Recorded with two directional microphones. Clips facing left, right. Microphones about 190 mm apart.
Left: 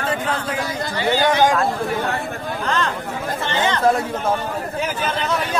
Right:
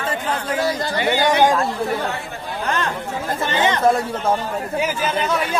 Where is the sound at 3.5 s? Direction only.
15° right (ahead or behind).